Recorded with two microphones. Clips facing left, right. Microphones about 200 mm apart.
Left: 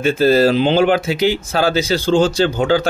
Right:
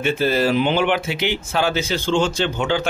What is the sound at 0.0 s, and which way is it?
Speech, 40° left (ahead or behind).